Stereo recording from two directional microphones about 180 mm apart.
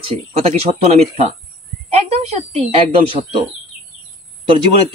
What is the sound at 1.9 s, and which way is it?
Speech, 35° right (ahead or behind).